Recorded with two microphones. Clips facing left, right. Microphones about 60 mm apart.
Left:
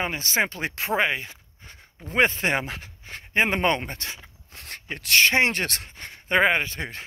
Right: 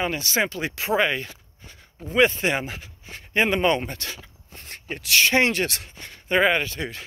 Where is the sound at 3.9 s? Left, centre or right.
Left.